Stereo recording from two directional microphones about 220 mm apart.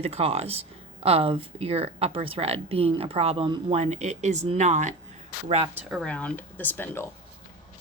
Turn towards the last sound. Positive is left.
turn(degrees=10)  # may be behind; listen again after turning